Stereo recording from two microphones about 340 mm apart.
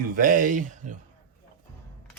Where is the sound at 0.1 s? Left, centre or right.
Right.